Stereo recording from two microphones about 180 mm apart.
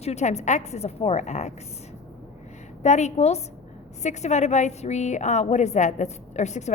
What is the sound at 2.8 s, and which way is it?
A woman's voice, 40° left (ahead or behind).